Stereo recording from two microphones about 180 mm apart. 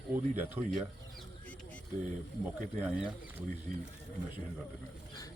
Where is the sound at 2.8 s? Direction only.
5° right (ahead or behind).